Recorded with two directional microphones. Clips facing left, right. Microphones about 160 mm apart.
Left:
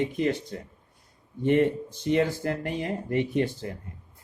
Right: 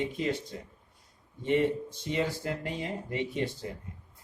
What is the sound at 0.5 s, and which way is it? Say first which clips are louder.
Speech: left 4 dB; 55° left (ahead or behind).